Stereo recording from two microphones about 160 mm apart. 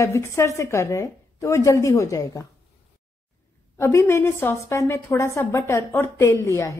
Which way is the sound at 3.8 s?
15° left (ahead or behind).